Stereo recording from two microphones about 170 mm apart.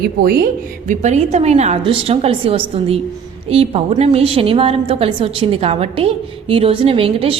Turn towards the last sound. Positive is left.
turn(degrees=-35)  # may be behind; listen again after turning